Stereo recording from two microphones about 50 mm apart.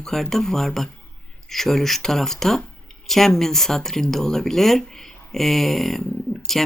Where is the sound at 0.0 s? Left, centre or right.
Centre.